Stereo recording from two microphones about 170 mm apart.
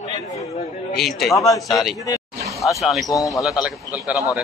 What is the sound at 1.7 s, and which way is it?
Speech, centre (ahead or behind).